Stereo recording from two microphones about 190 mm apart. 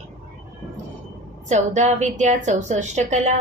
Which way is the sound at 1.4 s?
40° right (ahead or behind).